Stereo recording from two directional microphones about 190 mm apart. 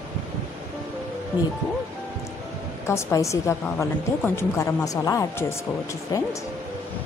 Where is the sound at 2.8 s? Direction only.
15° left (ahead or behind).